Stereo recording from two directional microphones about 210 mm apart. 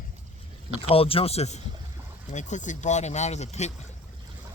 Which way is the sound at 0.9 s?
25° left (ahead or behind).